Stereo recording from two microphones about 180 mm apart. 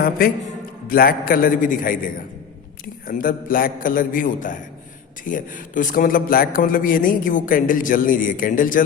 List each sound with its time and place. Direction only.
0.9 s a man's voice: 55° left (ahead or behind)
3.1 s a man's voice: 50° left (ahead or behind)